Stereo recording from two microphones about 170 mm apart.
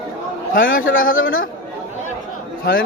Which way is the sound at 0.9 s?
55° left (ahead or behind).